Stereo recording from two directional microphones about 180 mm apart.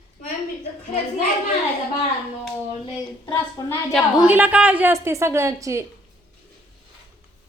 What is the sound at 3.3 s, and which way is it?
Speech, 20° left (ahead or behind).